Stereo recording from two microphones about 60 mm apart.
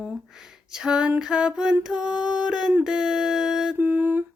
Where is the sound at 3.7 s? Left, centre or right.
Right.